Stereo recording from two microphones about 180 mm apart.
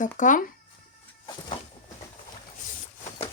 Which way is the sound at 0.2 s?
45° left (ahead or behind).